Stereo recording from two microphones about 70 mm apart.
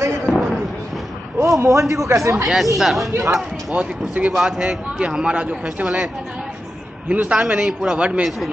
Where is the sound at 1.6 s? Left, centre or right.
Right.